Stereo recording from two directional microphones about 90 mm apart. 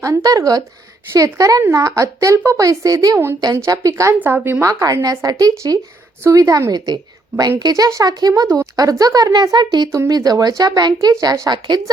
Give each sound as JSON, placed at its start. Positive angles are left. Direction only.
{"t": 0.0, "sound": "a woman's voice", "side_deg": -40}
{"t": 4.2, "sound": "speech", "side_deg": -25}
{"t": 4.6, "sound": "a woman's voice", "side_deg": -40}